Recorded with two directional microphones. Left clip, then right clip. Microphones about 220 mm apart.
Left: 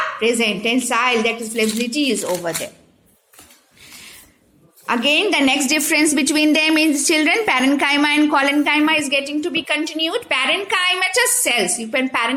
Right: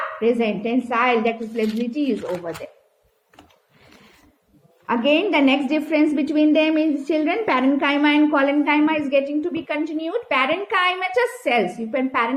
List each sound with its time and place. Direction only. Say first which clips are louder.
0.2 s a woman's voice: even; 20° left (ahead or behind)
4.9 s a woman's voice: left 2 dB; 20° left (ahead or behind)